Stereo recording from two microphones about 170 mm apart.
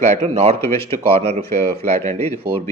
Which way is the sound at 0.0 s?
45° right (ahead or behind).